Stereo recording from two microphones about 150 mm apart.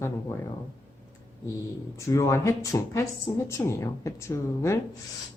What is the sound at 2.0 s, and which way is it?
A woman's voice, 20° left (ahead or behind).